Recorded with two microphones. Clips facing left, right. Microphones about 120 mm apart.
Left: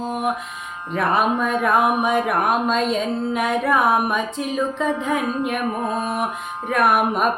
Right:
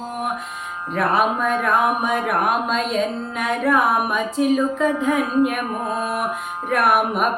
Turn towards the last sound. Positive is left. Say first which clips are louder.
# even
turn(degrees=-5)  # may be behind; listen again after turning